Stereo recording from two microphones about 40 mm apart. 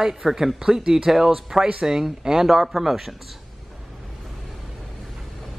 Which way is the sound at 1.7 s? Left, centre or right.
Right.